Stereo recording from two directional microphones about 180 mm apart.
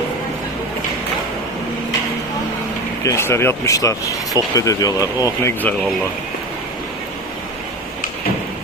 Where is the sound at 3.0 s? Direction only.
15° left (ahead or behind).